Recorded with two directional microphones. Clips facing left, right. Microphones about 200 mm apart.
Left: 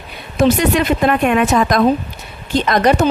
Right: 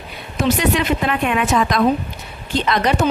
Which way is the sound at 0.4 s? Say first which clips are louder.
Left 4 dB; 45° left (ahead or behind).